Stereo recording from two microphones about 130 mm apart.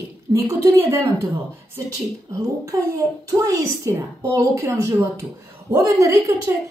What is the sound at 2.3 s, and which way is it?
A woman's voice, 25° right (ahead or behind).